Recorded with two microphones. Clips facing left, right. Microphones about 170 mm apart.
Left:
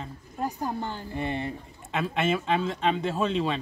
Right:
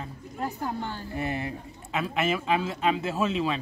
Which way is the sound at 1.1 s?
5° right (ahead or behind).